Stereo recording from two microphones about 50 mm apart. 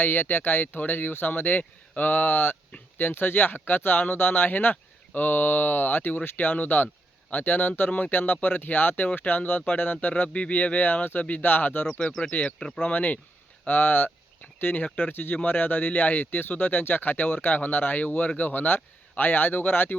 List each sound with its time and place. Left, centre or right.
0.0 s speech: left
11.9 s speech: left
12.3 s speech: left
15.1 s speech: left
15.4 s speech: left